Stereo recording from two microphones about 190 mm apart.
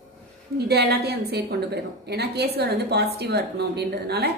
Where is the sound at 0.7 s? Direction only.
55° right (ahead or behind).